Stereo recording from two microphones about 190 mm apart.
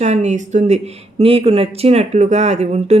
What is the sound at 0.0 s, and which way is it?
Speech, 35° right (ahead or behind).